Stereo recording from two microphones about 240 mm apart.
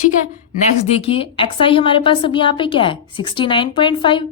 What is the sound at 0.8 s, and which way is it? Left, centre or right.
A woman's voice, left.